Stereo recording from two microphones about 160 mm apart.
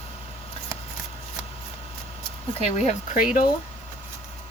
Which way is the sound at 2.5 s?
40° left (ahead or behind).